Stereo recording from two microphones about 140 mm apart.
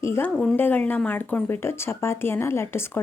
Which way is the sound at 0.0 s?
20° left (ahead or behind).